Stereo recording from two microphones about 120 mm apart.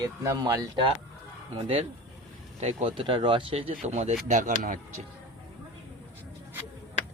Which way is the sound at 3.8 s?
65° right (ahead or behind).